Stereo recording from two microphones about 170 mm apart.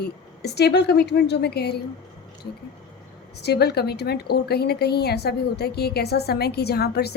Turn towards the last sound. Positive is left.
turn(degrees=70)  # may be behind; listen again after turning